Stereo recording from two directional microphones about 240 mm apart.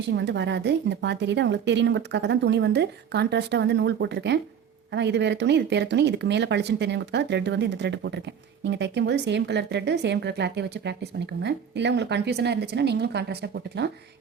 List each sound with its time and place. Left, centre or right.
0.1 s speech: right